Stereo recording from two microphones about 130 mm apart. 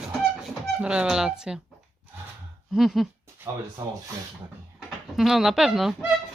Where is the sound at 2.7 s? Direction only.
Centre (ahead or behind).